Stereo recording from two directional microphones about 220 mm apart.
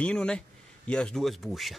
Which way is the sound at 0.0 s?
5° left (ahead or behind).